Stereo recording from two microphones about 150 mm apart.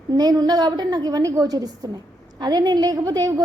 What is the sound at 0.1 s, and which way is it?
A woman's voice, 25° right (ahead or behind).